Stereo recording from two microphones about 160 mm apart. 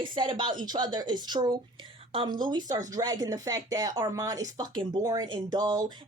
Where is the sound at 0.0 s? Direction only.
30° right (ahead or behind).